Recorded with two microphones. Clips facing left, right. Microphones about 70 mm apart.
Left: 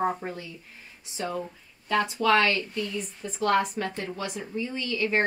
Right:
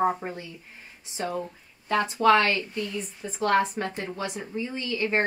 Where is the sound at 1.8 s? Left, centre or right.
Right.